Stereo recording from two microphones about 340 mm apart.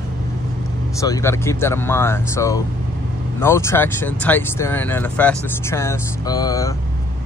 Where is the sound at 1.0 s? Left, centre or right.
Centre.